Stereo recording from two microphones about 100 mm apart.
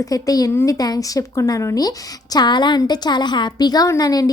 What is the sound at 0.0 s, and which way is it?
A woman's voice, 35° left (ahead or behind).